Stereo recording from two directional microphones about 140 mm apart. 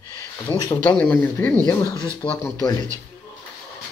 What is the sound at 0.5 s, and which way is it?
Speech, 25° left (ahead or behind).